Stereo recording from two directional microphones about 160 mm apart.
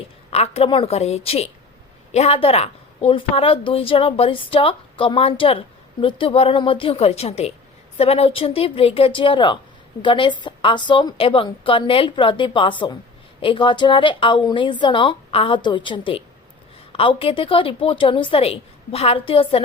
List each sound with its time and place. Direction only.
0.3 s a woman's voice: 40° left (ahead or behind)